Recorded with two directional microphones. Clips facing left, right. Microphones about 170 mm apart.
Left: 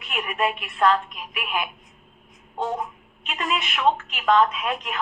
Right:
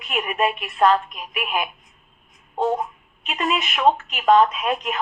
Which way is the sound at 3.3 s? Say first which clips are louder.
Right 3 dB; 25° right (ahead or behind).